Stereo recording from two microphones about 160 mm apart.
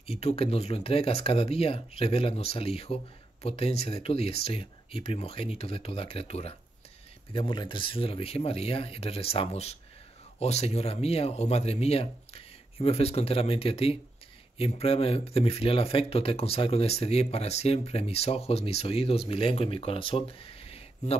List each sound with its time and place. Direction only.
0.0 s speech: 40° left (ahead or behind)